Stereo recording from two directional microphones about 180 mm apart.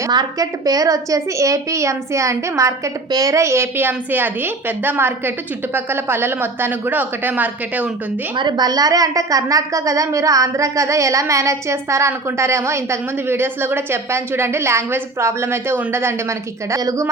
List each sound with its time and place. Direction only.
0.1 s a woman's voice: 20° right (ahead or behind)
8.4 s a woman's voice: 25° right (ahead or behind)